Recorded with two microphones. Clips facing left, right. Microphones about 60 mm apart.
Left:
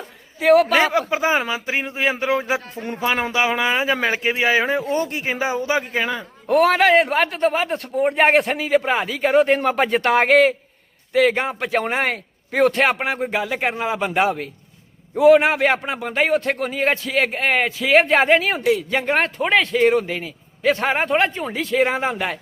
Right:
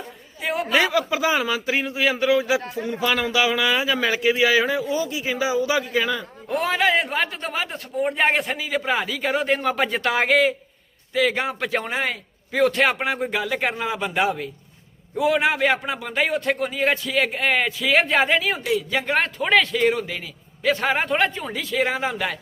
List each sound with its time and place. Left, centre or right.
0.4 s a man's voice: left
0.9 s a man's voice: left
4.8 s a man's voice: left
6.5 s a man's voice: left
7.5 s speech: left
8.1 s a man's voice: left
11.3 s a man's voice: left
11.8 s a man's voice: left
12.5 s a man's voice: left